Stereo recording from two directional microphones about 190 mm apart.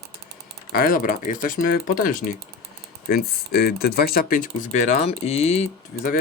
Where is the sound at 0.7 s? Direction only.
50° left (ahead or behind).